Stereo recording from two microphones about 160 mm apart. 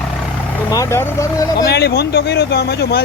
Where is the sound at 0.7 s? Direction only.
20° left (ahead or behind).